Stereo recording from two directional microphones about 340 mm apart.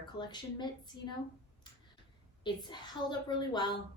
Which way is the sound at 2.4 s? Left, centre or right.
Centre.